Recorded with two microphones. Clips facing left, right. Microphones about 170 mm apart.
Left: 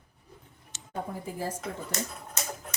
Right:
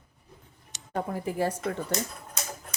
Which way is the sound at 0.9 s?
75° right (ahead or behind).